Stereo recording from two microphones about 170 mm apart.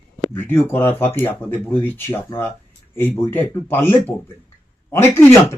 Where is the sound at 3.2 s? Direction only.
15° left (ahead or behind).